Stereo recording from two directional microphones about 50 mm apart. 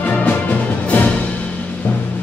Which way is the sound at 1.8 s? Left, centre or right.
Left.